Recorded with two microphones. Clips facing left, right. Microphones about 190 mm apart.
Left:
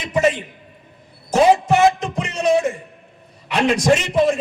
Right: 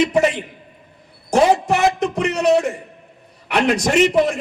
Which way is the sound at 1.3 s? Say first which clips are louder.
Left 1 dB; 65° right (ahead or behind).